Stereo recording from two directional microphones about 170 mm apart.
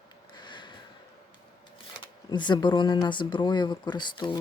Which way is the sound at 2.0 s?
25° left (ahead or behind).